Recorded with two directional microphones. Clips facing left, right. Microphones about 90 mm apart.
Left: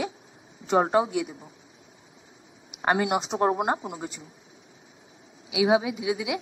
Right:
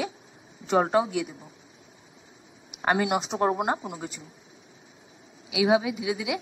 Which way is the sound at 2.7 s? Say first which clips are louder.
Even; 25° left (ahead or behind).